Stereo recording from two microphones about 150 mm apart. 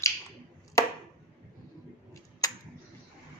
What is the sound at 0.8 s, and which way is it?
Chopping, 20° left (ahead or behind).